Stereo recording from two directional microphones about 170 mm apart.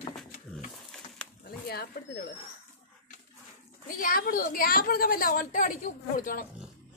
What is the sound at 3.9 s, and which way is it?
A woman's voice, 55° left (ahead or behind).